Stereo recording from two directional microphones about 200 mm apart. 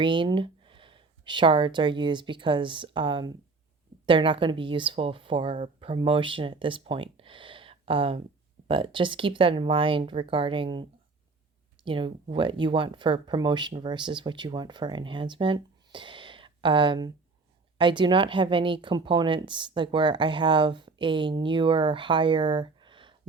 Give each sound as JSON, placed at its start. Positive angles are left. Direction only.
{"t": 0.0, "sound": "a woman's voice", "side_deg": -25}
{"t": 11.9, "sound": "a woman's voice", "side_deg": -25}